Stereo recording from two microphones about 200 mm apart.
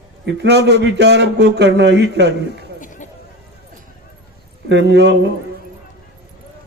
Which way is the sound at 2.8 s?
40° left (ahead or behind).